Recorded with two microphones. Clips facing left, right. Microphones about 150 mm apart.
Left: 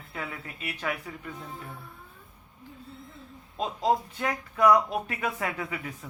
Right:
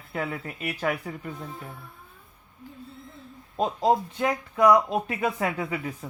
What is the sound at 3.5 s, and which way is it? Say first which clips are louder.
Speech: right 5 dB; 40° right (ahead or behind).